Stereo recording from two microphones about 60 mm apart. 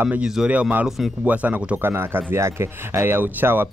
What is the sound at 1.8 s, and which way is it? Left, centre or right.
Speech, right.